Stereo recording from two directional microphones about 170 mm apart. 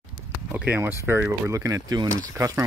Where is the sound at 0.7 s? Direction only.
10° right (ahead or behind).